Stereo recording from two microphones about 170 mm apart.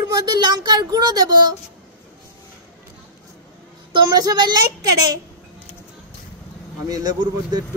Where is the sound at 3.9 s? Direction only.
25° right (ahead or behind).